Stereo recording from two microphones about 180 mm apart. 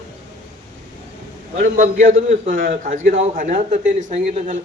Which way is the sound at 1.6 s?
45° right (ahead or behind).